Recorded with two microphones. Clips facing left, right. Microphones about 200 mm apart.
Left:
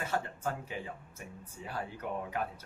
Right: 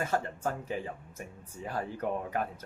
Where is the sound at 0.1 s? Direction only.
40° right (ahead or behind).